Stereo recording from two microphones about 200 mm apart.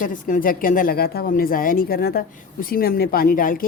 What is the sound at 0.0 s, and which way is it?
A woman's voice, 40° left (ahead or behind).